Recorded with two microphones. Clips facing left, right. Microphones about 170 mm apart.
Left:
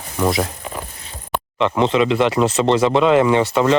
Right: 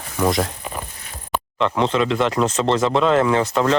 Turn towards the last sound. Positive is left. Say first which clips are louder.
# left 3 dB
turn(degrees=5)  # may be behind; listen again after turning